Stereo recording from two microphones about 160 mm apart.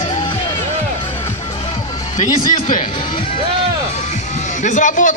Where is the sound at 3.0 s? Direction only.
35° left (ahead or behind).